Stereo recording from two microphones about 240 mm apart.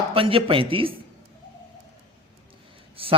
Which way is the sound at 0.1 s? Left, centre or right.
Right.